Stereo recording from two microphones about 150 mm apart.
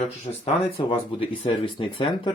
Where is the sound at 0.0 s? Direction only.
45° left (ahead or behind).